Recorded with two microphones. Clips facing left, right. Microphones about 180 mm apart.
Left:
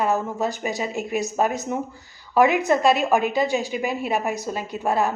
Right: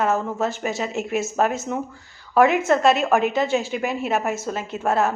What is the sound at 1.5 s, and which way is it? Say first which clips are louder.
Speech: even; 15° left (ahead or behind).